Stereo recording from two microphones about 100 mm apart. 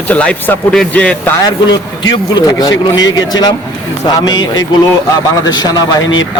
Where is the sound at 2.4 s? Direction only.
40° left (ahead or behind).